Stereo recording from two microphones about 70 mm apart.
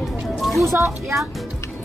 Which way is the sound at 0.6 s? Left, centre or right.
Right.